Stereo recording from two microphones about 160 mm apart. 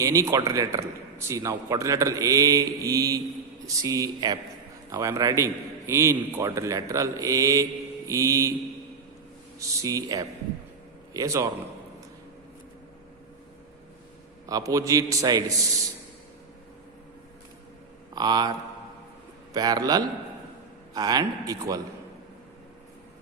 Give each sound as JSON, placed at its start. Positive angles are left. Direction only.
{"t": 0.0, "sound": "a man's voice", "side_deg": -20}
{"t": 9.6, "sound": "a man's voice", "side_deg": -20}
{"t": 14.4, "sound": "a man's voice", "side_deg": -20}
{"t": 18.1, "sound": "speech", "side_deg": -25}
{"t": 19.5, "sound": "a man's voice", "side_deg": -25}